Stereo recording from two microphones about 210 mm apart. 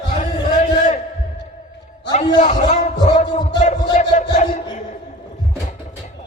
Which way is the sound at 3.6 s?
35° left (ahead or behind).